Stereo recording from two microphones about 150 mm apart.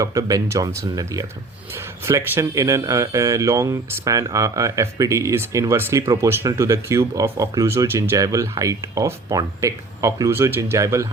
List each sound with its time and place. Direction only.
0.0 s speech: 25° right (ahead or behind)